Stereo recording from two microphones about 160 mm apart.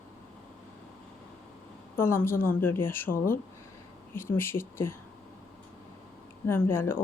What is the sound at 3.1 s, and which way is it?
Speech, 65° left (ahead or behind).